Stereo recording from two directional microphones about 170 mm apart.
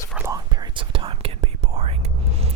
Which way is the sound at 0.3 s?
25° right (ahead or behind).